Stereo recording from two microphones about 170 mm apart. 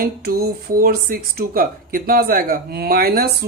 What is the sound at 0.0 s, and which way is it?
Speech, 60° right (ahead or behind).